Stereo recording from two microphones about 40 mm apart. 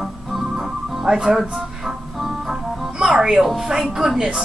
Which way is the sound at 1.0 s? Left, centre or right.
Centre.